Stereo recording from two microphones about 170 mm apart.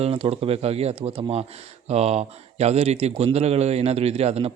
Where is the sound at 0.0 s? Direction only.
35° right (ahead or behind).